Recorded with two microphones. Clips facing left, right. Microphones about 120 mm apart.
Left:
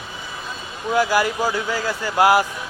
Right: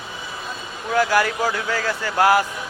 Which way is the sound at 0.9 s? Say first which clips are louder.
Even; 10° left (ahead or behind).